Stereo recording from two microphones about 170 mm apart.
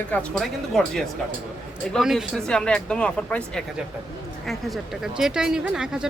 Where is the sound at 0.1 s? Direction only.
5° left (ahead or behind).